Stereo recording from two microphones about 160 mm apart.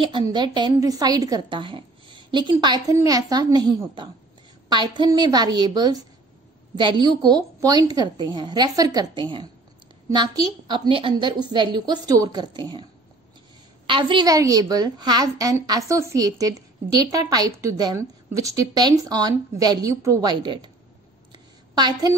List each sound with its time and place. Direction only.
0.0 s a woman's voice: 30° right (ahead or behind)
13.8 s a woman's voice: 30° right (ahead or behind)
21.3 s a sound: 25° right (ahead or behind)